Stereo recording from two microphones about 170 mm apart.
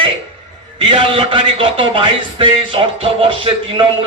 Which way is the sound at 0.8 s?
35° right (ahead or behind).